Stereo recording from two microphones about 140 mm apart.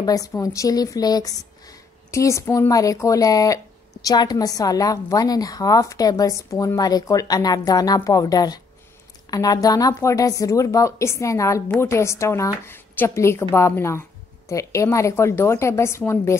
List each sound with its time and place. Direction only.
0.0 s a woman's voice: 25° left (ahead or behind)